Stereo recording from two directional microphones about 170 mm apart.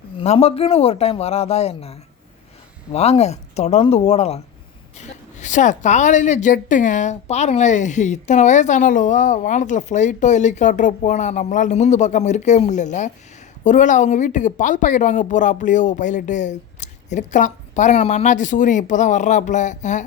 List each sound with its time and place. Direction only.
0.2 s a man's voice: 35° left (ahead or behind)